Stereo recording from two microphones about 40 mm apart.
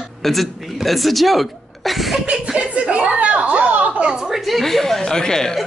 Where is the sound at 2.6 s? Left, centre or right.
Right.